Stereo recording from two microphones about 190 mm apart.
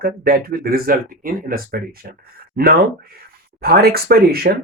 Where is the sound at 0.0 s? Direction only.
55° right (ahead or behind).